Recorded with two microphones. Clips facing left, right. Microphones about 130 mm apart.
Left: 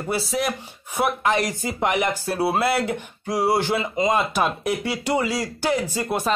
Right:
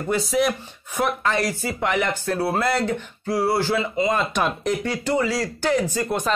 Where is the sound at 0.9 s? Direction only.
15° left (ahead or behind).